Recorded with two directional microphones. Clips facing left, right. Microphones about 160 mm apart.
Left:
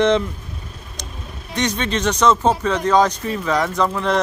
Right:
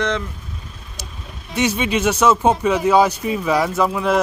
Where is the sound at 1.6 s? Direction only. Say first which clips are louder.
Right 2 dB; 10° right (ahead or behind).